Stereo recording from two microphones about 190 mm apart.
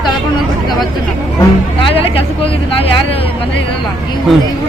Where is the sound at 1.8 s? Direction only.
30° left (ahead or behind).